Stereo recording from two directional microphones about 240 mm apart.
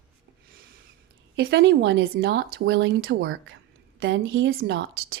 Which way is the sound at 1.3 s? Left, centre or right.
Right.